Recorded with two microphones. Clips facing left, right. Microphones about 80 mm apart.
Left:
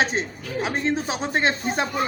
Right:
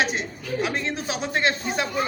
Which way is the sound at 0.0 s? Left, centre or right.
Left.